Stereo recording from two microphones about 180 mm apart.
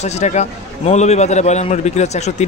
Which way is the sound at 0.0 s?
40° left (ahead or behind).